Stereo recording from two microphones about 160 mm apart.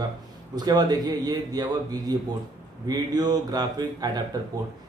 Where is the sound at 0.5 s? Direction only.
25° right (ahead or behind).